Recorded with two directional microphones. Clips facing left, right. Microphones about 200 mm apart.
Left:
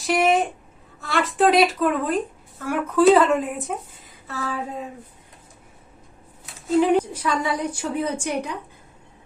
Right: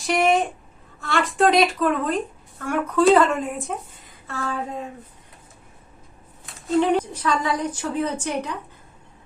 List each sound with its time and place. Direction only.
0.0 s a sound: centre (ahead or behind)
1.0 s speech: centre (ahead or behind)
6.4 s a woman's voice: 5° left (ahead or behind)